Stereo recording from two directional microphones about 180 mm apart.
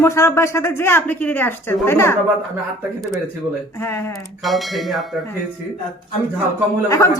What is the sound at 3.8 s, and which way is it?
Speech, 15° left (ahead or behind).